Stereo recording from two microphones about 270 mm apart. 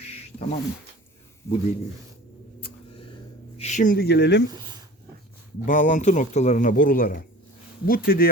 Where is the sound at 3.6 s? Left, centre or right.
Left.